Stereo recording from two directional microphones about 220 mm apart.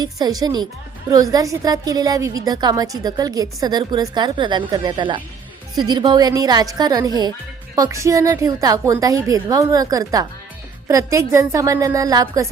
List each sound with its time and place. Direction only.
0.0 s a woman's voice: 15° right (ahead or behind)